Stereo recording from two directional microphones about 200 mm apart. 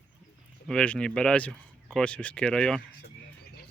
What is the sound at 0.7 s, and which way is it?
Speech, 5° left (ahead or behind).